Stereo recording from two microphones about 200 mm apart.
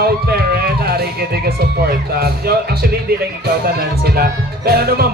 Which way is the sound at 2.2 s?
50° right (ahead or behind).